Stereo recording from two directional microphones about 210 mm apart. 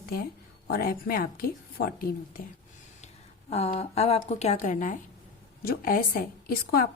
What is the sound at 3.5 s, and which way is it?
A woman's voice, 30° left (ahead or behind).